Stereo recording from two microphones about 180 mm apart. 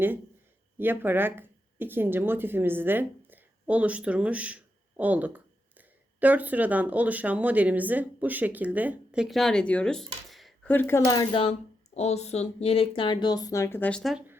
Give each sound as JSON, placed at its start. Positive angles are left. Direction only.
{"t": 0.8, "sound": "speech", "side_deg": -10}
{"t": 11.0, "sound": "speech", "side_deg": 25}
{"t": 11.9, "sound": "speech", "side_deg": 40}